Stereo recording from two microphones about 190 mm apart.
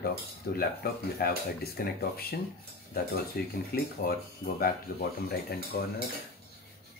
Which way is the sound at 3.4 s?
55° left (ahead or behind).